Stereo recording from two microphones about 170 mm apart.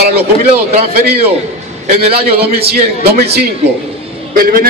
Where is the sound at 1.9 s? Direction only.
35° right (ahead or behind).